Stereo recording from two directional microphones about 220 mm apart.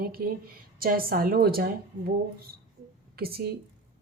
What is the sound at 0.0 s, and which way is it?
A woman's voice, 40° right (ahead or behind).